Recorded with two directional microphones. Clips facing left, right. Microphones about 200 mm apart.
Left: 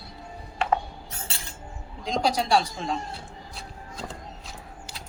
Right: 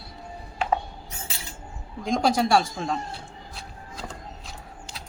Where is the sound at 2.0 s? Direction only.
50° right (ahead or behind).